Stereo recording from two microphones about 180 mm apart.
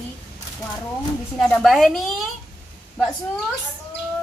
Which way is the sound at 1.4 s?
5° left (ahead or behind).